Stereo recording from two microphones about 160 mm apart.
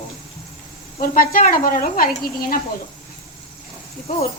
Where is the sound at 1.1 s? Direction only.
60° left (ahead or behind).